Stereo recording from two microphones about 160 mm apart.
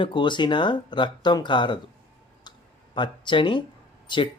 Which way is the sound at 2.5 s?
25° left (ahead or behind).